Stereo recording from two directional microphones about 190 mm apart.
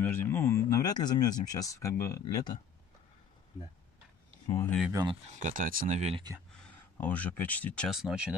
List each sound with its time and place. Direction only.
0.0 s speech: 10° left (ahead or behind)
4.6 s speech: centre (ahead or behind)
5.3 s speech: 40° right (ahead or behind)
6.6 s speech: 10° left (ahead or behind)